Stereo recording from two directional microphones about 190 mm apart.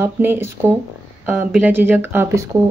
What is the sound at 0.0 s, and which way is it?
Speech, 10° right (ahead or behind).